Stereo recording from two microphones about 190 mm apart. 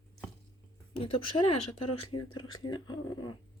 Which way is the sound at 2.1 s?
25° left (ahead or behind).